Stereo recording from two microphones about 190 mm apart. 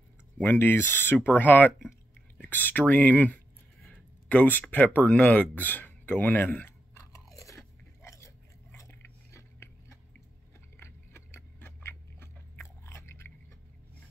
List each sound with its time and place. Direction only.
0.4 s speech: 10° left (ahead or behind)
7.2 s crunch: 15° left (ahead or behind)
8.7 s biting: 15° left (ahead or behind)